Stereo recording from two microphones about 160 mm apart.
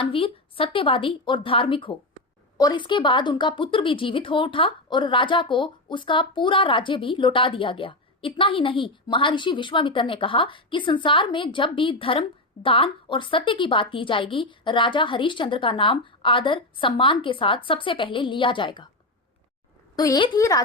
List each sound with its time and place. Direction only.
0.0 s a woman's voice: 35° left (ahead or behind)
20.0 s a woman's voice: 25° left (ahead or behind)